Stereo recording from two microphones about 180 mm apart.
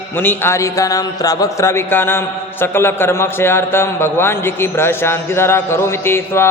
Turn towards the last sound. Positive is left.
turn(degrees=15)  # may be behind; listen again after turning